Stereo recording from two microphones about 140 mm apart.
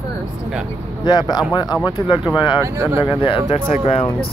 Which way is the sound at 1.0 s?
30° left (ahead or behind).